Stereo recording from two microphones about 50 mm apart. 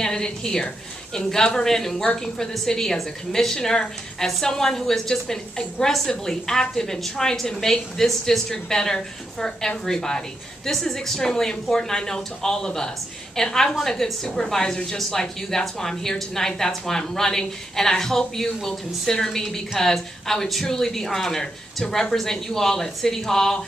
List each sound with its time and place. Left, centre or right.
0.0 s a woman's voice: centre